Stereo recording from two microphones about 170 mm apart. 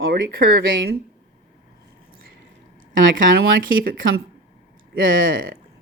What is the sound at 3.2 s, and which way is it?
Speech, 80° right.